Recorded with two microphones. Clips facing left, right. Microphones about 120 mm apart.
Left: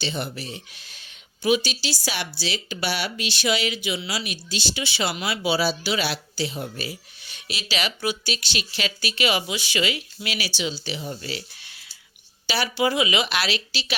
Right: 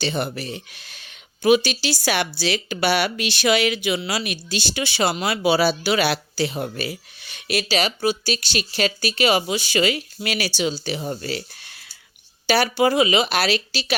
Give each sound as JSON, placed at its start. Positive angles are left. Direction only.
{"t": 0.0, "sound": "speech", "side_deg": -55}
{"t": 7.7, "sound": "speech", "side_deg": -35}